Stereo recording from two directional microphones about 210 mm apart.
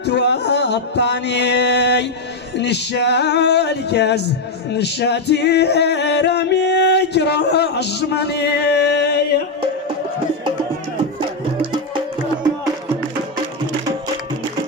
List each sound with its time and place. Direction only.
0.0 s music: 55° left (ahead or behind)